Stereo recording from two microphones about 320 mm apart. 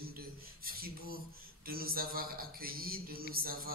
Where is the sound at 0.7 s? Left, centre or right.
Right.